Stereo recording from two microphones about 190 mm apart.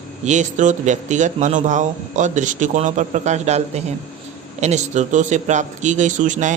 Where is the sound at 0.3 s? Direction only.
40° right (ahead or behind).